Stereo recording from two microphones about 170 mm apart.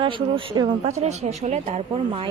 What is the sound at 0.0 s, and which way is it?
Speech, 25° right (ahead or behind).